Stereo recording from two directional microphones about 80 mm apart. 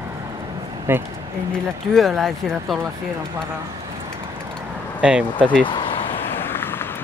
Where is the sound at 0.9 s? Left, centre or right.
Right.